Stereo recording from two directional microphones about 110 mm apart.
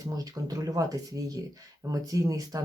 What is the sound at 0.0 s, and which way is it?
Speech, 35° right (ahead or behind).